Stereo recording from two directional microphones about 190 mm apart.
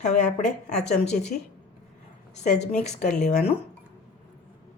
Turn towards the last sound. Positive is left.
turn(degrees=40)  # may be behind; listen again after turning